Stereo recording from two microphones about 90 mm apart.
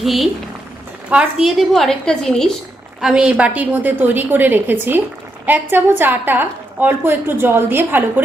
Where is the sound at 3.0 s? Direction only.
10° right (ahead or behind).